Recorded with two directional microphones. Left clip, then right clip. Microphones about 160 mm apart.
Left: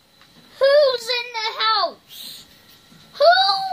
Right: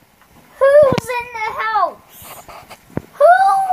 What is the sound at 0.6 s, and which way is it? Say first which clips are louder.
Child singing: right 5 dB; 70° left (ahead or behind).